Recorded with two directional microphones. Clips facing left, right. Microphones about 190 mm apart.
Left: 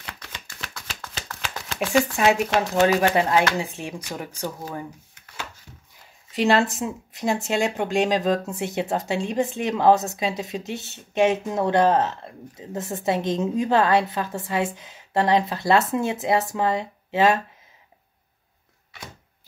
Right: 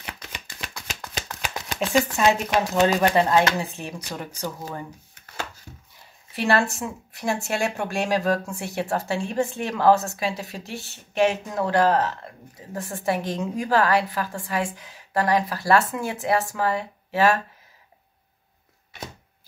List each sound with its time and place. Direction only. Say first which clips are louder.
0.0 s shuffling cards: right 1 dB; 15° right (ahead or behind)
2.2 s speech: left 1 dB; 10° left (ahead or behind)
6.3 s speech: left 2 dB; 20° left (ahead or behind)